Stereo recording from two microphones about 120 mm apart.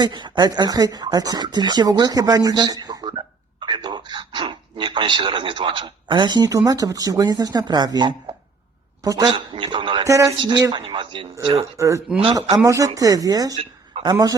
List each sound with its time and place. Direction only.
0.0 s a man's voice: 40° right (ahead or behind)
9.3 s a woman's voice: 45° right (ahead or behind)
10.0 s speech: 30° right (ahead or behind)
10.3 s a woman's voice: 40° right (ahead or behind)
11.8 s speech: 25° right (ahead or behind)
12.1 s speech: 40° right (ahead or behind)